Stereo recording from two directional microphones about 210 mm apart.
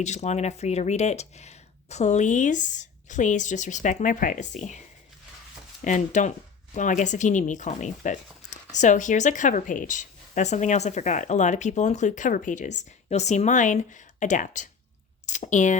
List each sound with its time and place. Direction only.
0.0 s speech: 35° left (ahead or behind)
5.8 s speech: 35° left (ahead or behind)